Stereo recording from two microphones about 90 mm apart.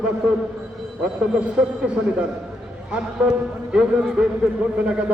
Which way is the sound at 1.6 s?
10° right (ahead or behind).